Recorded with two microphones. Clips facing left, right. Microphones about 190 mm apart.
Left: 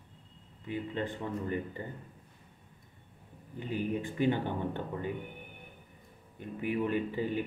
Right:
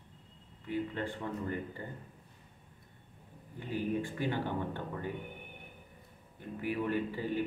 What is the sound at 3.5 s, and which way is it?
Speech, 20° left (ahead or behind).